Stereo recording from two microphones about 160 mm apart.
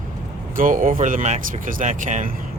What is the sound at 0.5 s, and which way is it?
Speech, 55° right (ahead or behind).